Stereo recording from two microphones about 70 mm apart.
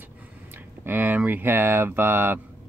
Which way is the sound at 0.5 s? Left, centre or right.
Right.